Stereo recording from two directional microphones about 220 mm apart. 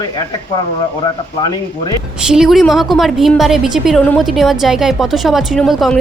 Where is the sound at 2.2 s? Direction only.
5° right (ahead or behind).